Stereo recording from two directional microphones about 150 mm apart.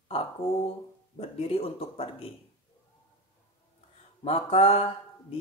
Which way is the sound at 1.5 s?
40° left (ahead or behind).